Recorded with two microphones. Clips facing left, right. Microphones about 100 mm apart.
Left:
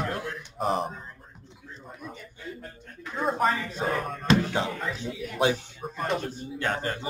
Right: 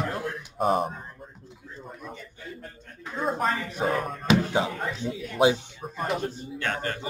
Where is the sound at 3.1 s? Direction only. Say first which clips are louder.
Left 1 dB; centre (ahead or behind).